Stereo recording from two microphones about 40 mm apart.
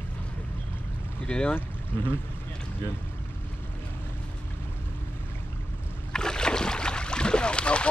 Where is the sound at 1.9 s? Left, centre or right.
Left.